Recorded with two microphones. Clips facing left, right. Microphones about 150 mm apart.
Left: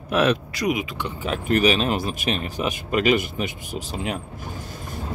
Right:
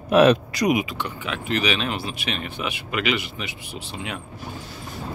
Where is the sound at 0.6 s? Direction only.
15° right (ahead or behind).